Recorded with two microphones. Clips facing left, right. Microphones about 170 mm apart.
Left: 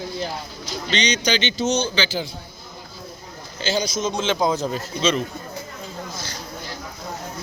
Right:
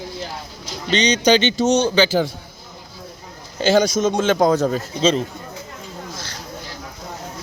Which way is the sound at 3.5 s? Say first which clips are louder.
Right 8 dB; 50° right (ahead or behind).